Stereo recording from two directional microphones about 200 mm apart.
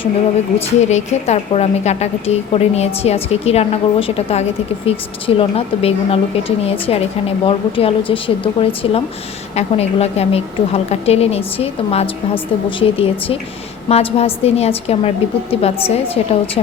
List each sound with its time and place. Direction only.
0.6 s a woman's voice: 35° left (ahead or behind)